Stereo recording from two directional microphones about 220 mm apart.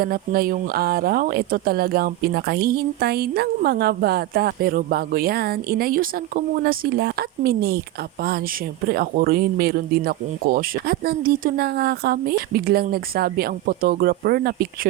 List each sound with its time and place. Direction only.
0.0 s speech: 40° right (ahead or behind)